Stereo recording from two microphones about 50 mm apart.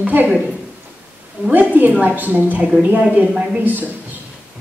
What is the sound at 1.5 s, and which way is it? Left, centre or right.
A woman's voice, right.